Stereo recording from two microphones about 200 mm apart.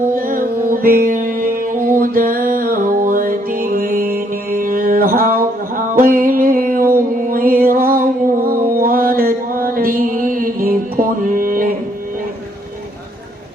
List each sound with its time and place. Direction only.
0.1 s music: 45° right (ahead or behind)